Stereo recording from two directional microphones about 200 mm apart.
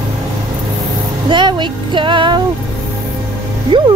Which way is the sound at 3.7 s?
25° right (ahead or behind).